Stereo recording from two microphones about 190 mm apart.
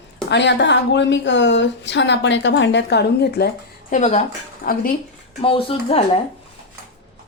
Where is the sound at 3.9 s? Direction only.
40° left (ahead or behind).